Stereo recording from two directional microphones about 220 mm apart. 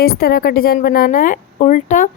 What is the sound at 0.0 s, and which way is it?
A woman's voice, 45° left (ahead or behind).